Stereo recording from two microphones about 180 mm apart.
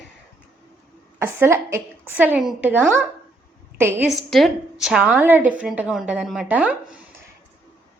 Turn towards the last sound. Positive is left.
turn(degrees=-5)  # may be behind; listen again after turning